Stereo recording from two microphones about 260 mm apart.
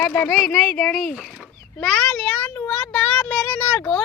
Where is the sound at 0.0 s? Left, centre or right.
Centre.